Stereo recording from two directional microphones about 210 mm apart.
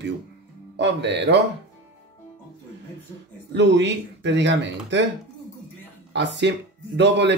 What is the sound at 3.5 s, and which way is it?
Speech, 55° right (ahead or behind).